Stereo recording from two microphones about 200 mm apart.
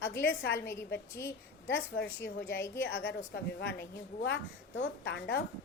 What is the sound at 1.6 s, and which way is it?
A woman's voice, 65° left (ahead or behind).